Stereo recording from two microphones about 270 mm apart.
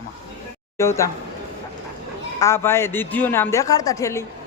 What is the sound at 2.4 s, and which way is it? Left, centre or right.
A woman's voice, centre.